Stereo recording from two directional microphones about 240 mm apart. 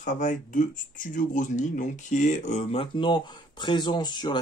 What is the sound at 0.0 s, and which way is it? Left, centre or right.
Speech, left.